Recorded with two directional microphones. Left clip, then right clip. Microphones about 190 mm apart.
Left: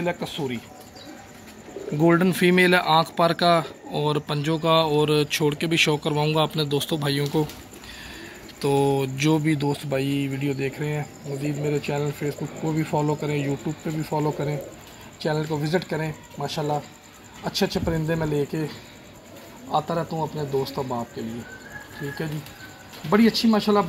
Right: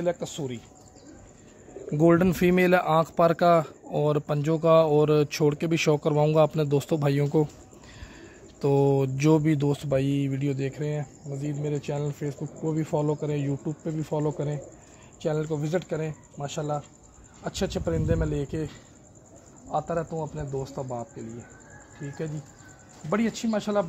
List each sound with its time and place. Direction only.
0.0 s speech: 60° right (ahead or behind)
2.0 s speech: 60° right (ahead or behind)
8.5 s speech: 55° right (ahead or behind)
14.0 s speech: 40° right (ahead or behind)
19.7 s speech: 40° right (ahead or behind)
23.0 s speech: 35° right (ahead or behind)